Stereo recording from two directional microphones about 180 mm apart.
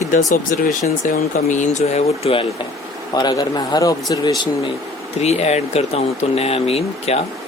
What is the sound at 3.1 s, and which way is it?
Speech, 20° left (ahead or behind).